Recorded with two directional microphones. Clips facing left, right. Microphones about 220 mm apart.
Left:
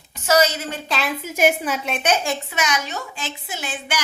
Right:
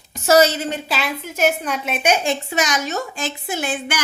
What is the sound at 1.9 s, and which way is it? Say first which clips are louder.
Speech: right 4 dB; 10° right (ahead or behind).